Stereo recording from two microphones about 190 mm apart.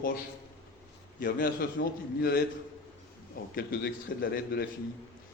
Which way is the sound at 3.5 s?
55° left (ahead or behind).